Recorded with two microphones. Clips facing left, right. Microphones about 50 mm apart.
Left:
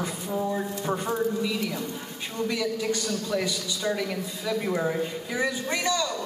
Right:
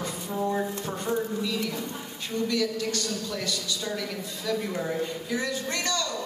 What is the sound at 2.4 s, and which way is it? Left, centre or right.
A man's voice, centre.